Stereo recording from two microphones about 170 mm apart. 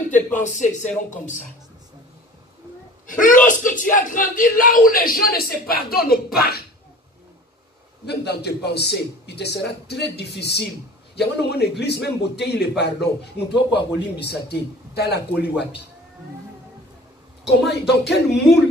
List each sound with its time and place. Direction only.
0.1 s speech: 45° left (ahead or behind)
3.1 s speech: 50° left (ahead or behind)
8.0 s a man's voice: 75° left (ahead or behind)
17.5 s a man's voice: 75° left (ahead or behind)